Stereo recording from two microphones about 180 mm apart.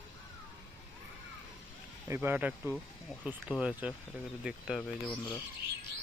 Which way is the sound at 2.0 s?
15° right (ahead or behind).